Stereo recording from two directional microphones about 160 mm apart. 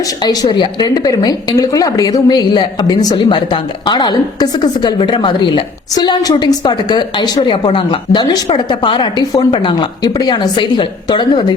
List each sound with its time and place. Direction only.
0.3 s a woman's voice: 25° left (ahead or behind)